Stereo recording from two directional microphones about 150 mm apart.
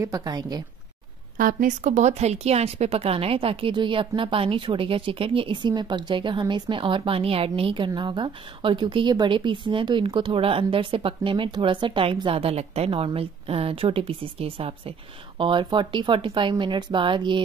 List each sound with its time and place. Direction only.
0.0 s a woman's voice: 25° right (ahead or behind)
1.4 s a woman's voice: 65° right (ahead or behind); by 17.4 s 35° right (ahead or behind)